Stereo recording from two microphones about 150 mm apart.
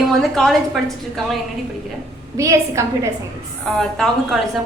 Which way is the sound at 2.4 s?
20° right (ahead or behind).